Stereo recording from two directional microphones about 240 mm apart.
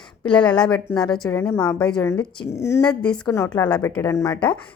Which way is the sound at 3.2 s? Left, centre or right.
Centre.